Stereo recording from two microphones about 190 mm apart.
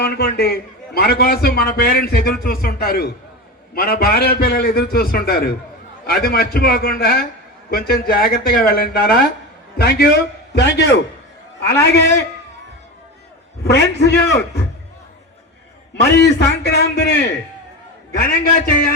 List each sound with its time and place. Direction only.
0.0 s a man's voice: 55° left (ahead or behind)
13.7 s a man's voice: 60° left (ahead or behind)
16.0 s a man's voice: 60° left (ahead or behind)